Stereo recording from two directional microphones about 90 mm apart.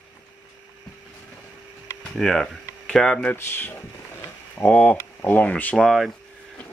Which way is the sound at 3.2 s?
25° left (ahead or behind).